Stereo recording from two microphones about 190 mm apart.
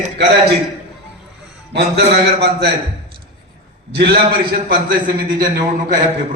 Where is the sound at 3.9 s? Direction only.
55° right (ahead or behind).